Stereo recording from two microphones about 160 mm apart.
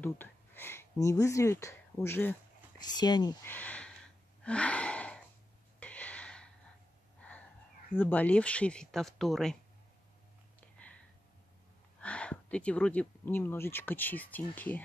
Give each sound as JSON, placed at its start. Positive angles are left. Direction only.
{"t": 0.0, "sound": "speech", "side_deg": 10}
{"t": 3.0, "sound": "speech", "side_deg": 25}
{"t": 3.4, "sound": "gasp", "side_deg": 10}
{"t": 5.8, "sound": "a sound", "side_deg": 10}
{"t": 7.9, "sound": "speech", "side_deg": 10}
{"t": 12.0, "sound": "speech", "side_deg": 10}